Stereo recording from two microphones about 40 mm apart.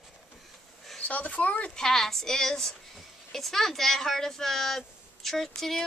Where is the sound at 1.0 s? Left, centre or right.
Left.